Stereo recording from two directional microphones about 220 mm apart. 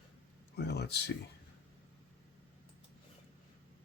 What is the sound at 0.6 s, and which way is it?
Speech, 50° left (ahead or behind).